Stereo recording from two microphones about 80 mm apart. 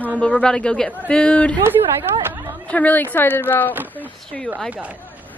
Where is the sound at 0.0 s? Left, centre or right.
Centre.